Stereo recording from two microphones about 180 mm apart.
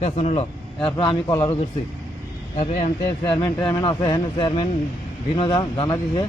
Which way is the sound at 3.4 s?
15° left (ahead or behind).